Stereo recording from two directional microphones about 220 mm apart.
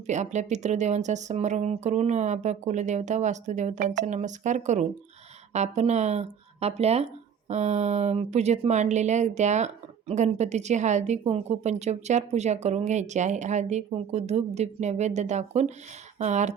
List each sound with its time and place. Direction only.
0.1 s speech: 30° right (ahead or behind)